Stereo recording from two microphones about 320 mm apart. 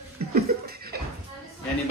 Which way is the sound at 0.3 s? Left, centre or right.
Right.